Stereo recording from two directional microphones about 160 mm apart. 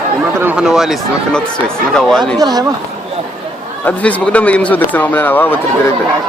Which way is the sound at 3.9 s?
10° left (ahead or behind).